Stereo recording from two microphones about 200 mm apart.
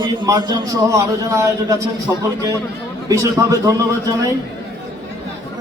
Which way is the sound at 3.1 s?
15° right (ahead or behind).